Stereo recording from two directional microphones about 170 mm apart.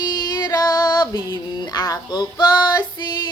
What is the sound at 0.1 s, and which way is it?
Music, 25° left (ahead or behind).